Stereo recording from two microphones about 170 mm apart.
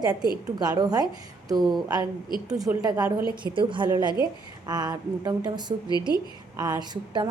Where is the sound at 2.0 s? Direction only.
25° left (ahead or behind).